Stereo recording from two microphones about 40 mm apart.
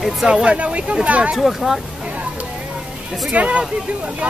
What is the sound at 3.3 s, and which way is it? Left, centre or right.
Speech, right.